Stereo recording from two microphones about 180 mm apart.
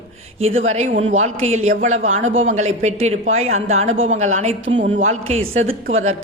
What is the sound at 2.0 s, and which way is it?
Speech, 90° right.